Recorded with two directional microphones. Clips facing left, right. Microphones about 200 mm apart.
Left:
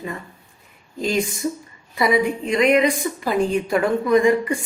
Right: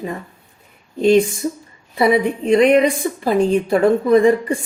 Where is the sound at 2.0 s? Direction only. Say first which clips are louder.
Right 3 dB; 35° right (ahead or behind).